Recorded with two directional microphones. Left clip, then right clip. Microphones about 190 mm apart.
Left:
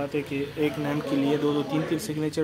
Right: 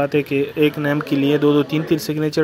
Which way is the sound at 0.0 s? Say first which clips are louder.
Right 11 dB; 40° right (ahead or behind).